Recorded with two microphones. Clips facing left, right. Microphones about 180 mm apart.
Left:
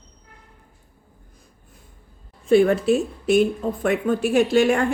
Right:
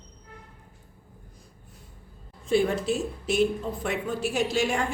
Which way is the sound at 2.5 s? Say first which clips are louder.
Left 8 dB; 60° left (ahead or behind).